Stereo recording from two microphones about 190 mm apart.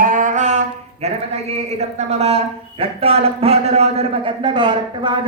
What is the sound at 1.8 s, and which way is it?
A man's voice, 35° right (ahead or behind).